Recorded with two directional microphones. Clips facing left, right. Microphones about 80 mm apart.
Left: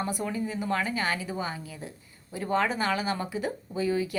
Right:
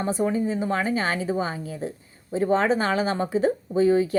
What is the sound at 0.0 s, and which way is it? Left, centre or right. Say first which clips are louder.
Speech: right 7 dB; right.